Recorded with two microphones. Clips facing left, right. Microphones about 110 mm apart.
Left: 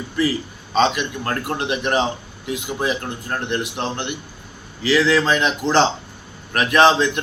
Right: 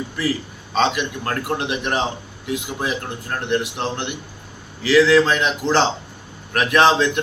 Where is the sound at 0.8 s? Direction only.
5° right (ahead or behind).